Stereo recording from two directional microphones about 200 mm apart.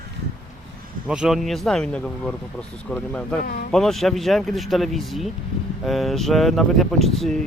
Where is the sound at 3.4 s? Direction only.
50° left (ahead or behind).